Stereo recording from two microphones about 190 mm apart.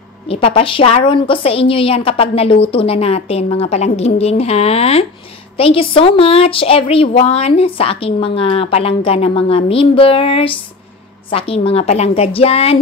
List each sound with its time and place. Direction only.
0.3 s a woman's voice: 30° left (ahead or behind)